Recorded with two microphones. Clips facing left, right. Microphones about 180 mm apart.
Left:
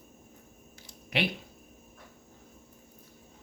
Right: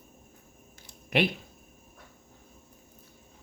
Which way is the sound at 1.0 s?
50° right (ahead or behind).